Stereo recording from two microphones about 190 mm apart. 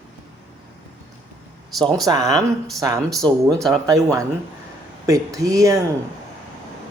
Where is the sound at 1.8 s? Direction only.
20° right (ahead or behind).